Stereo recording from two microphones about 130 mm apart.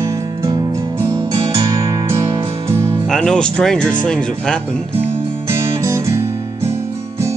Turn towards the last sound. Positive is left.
turn(degrees=-20)  # may be behind; listen again after turning